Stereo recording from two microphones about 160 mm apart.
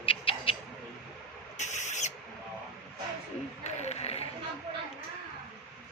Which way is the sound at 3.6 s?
45° left (ahead or behind).